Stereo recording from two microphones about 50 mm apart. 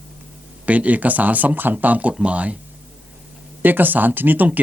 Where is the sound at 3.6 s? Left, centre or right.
Right.